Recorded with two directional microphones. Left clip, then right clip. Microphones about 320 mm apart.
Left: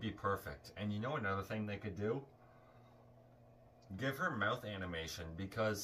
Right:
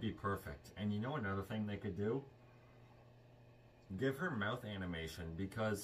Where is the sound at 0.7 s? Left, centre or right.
Left.